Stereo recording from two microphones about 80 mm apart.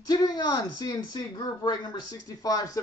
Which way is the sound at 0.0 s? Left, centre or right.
Left.